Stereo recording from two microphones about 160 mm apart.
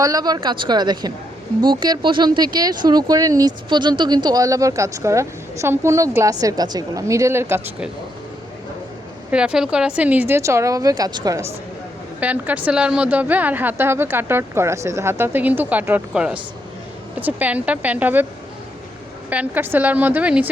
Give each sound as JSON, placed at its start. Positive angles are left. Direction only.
{"t": 0.0, "sound": "speech", "side_deg": -25}
{"t": 9.3, "sound": "a woman's voice", "side_deg": -5}
{"t": 12.2, "sound": "a woman's voice", "side_deg": -10}
{"t": 19.3, "sound": "a woman's voice", "side_deg": -10}